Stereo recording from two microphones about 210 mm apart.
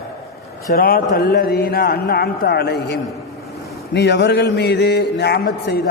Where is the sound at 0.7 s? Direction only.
45° left (ahead or behind).